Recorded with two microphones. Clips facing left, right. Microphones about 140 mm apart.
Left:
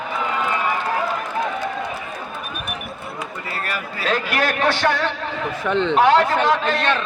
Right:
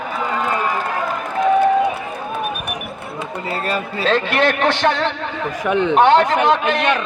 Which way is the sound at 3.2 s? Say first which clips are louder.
Right 6 dB; 25° right (ahead or behind).